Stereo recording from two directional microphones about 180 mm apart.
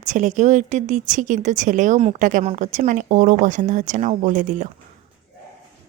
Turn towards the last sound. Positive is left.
turn(degrees=-45)  # may be behind; listen again after turning